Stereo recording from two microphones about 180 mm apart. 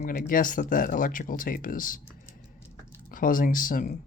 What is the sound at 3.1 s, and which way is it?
Speech, 50° left (ahead or behind).